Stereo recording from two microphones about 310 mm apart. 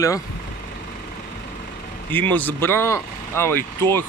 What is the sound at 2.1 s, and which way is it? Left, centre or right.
Speech, centre.